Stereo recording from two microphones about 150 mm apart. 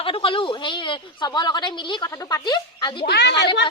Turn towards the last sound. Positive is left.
turn(degrees=90)